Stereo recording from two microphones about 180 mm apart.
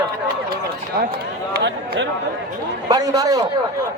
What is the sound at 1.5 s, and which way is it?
Speech, 75° right (ahead or behind).